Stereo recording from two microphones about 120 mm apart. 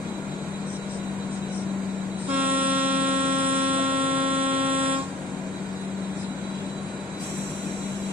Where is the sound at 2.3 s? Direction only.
15° right (ahead or behind).